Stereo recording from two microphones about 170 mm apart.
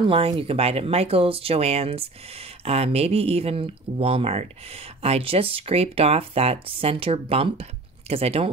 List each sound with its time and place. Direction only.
0.0 s speech: 30° right (ahead or behind)